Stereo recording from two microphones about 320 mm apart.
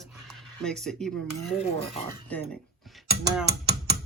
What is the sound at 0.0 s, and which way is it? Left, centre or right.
Speech, centre.